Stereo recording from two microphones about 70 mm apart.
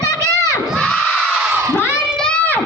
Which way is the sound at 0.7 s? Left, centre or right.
Centre.